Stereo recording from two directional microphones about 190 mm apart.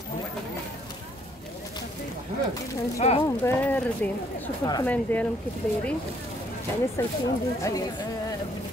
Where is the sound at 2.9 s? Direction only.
35° left (ahead or behind).